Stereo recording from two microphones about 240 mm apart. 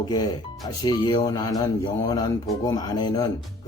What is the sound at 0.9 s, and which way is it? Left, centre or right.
Speech, centre.